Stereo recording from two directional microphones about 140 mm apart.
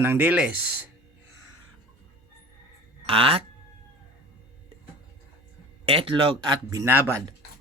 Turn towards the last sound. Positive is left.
turn(degrees=-15)  # may be behind; listen again after turning